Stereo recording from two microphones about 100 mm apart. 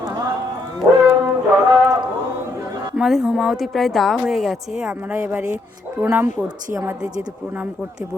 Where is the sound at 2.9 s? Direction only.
5° right (ahead or behind).